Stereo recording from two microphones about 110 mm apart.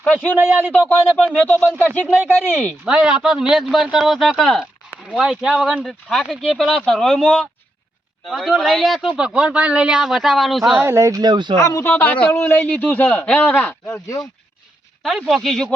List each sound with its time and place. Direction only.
0.0 s a man's voice: 10° left (ahead or behind)
0.3 s speech: 15° right (ahead or behind)
0.7 s a man's voice: 15° left (ahead or behind)
2.0 s speech: 10° right (ahead or behind)
2.4 s a man's voice: 15° left (ahead or behind)
2.8 s a man's voice: 5° right (ahead or behind)
5.8 s a man's voice: 5° left (ahead or behind)
10.8 s speech: 25° right (ahead or behind)
11.2 s speech: 45° right (ahead or behind)
11.6 s speech: 25° left (ahead or behind)
11.9 s a man's voice: 10° left (ahead or behind)
15.0 s a man's voice: centre (ahead or behind)